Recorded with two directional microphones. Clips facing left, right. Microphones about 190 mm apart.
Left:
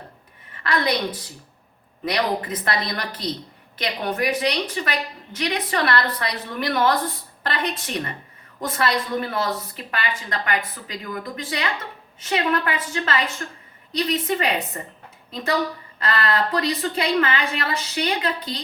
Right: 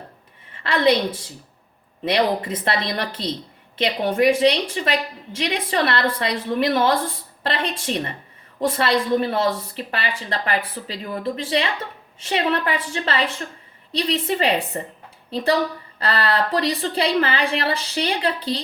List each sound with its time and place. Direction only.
0.5 s a woman's voice: 25° right (ahead or behind)
16.0 s speech: 30° right (ahead or behind)